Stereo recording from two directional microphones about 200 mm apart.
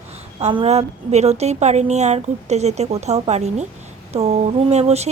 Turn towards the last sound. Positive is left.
turn(degrees=-35)  # may be behind; listen again after turning